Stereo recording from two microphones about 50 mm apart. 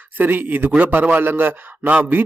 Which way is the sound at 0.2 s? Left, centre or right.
Right.